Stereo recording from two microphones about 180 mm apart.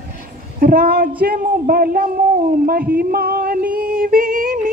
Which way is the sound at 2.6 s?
55° right (ahead or behind).